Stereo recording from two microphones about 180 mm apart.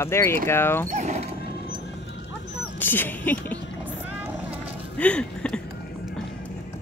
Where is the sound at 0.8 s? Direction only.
40° right (ahead or behind).